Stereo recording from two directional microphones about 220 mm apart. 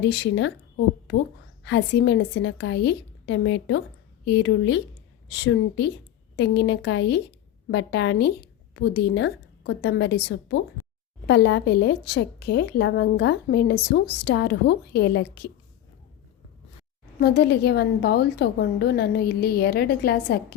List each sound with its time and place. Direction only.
0.0 s a woman's voice: 50° left (ahead or behind)
1.6 s a woman's voice: 55° left (ahead or behind)
17.2 s a woman's voice: 45° left (ahead or behind)